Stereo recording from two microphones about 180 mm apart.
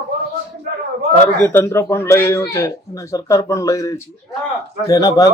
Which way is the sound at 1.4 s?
10° left (ahead or behind).